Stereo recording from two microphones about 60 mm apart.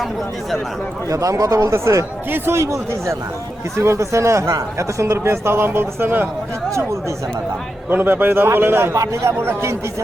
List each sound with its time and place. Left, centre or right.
1.1 s speech: right
7.9 s a man's voice: right